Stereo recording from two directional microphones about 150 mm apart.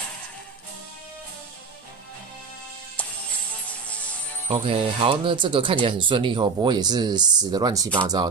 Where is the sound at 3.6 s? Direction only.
10° left (ahead or behind).